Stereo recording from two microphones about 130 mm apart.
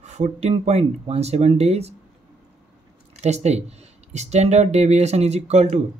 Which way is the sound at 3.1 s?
55° right (ahead or behind).